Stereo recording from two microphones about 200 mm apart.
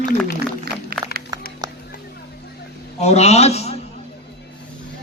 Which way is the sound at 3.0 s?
35° left (ahead or behind).